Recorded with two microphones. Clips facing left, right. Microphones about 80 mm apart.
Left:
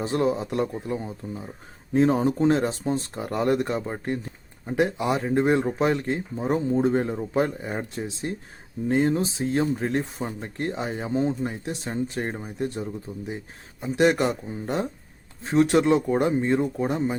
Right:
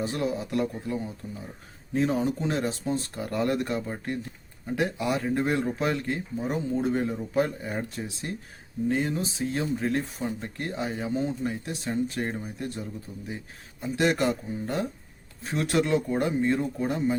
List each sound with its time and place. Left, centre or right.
0.0 s speech: left
7.3 s speech: left
8.9 s speech: left
11.4 s speech: left